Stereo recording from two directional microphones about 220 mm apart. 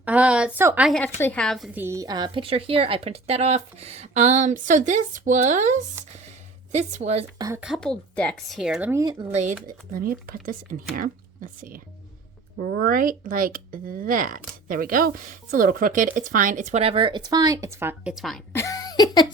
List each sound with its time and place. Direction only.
0.0 s a woman's voice: 5° right (ahead or behind); by 5.8 s 35° right (ahead or behind)
6.1 s a sound: 30° right (ahead or behind)
7.3 s speech: 15° right (ahead or behind)
7.6 s speech: centre (ahead or behind)
9.3 s speech: 35° right (ahead or behind)
12.8 s speech: 40° right (ahead or behind); by 18.6 s centre (ahead or behind)
18.6 s a sound: 15° left (ahead or behind)